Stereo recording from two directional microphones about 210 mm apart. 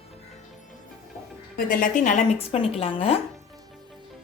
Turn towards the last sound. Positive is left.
turn(degrees=30)  # may be behind; listen again after turning